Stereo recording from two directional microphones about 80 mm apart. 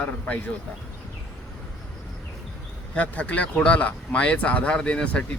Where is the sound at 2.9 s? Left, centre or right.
Centre.